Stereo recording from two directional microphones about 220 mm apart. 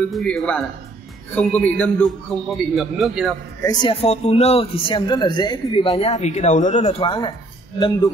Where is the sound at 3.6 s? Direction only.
20° left (ahead or behind).